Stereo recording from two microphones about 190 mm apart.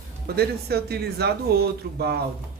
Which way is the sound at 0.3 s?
55° right (ahead or behind).